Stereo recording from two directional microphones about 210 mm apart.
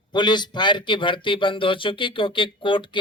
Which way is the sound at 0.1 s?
20° left (ahead or behind).